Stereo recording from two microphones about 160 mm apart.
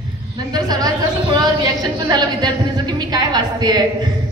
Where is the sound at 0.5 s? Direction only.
25° right (ahead or behind).